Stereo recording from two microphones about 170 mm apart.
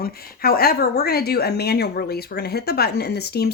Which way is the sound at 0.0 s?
65° left (ahead or behind).